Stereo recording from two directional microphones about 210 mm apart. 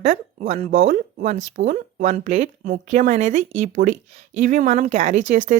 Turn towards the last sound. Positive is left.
turn(degrees=-35)  # may be behind; listen again after turning